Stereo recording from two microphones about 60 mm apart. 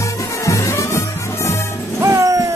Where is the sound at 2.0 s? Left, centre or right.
Right.